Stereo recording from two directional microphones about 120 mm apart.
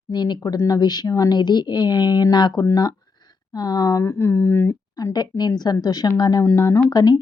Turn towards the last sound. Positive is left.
turn(degrees=30)  # may be behind; listen again after turning